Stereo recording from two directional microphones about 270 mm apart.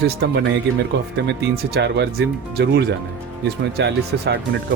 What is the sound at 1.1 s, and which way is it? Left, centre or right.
Speech, right.